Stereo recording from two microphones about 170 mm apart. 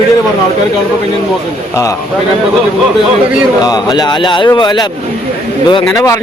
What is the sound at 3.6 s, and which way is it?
A man's voice, 25° left (ahead or behind).